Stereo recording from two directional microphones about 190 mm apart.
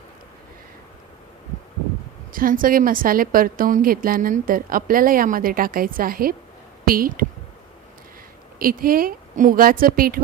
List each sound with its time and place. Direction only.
2.3 s a woman's voice: 45° right (ahead or behind)
8.5 s a woman's voice: 50° right (ahead or behind)